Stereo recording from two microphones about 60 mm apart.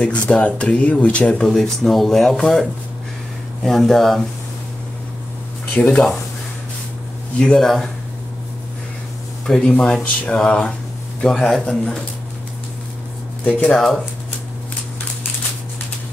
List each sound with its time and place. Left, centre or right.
0.0 s speech: left
1.4 s speech: centre
3.6 s speech: centre
5.8 s speech: centre
7.3 s speech: centre
9.5 s speech: centre
11.2 s speech: centre
13.4 s speech: left
13.7 s speech: centre